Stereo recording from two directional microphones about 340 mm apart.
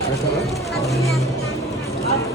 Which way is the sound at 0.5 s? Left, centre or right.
Centre.